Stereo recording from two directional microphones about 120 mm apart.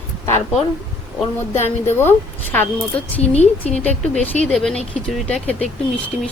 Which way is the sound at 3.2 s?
60° left (ahead or behind).